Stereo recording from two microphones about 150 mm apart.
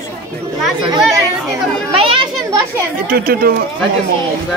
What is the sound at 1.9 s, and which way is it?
Children playing, 40° right (ahead or behind).